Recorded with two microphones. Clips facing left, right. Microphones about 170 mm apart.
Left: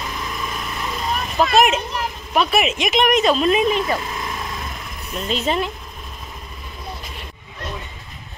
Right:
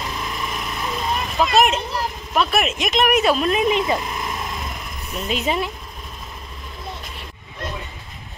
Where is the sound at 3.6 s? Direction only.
20° right (ahead or behind).